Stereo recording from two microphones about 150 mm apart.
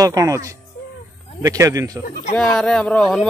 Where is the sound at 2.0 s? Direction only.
65° left (ahead or behind).